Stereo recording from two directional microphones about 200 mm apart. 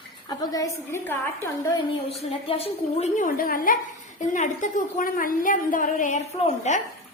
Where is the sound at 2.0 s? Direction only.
30° left (ahead or behind).